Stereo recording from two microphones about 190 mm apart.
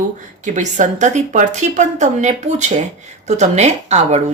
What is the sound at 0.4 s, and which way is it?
Speech, 40° right (ahead or behind).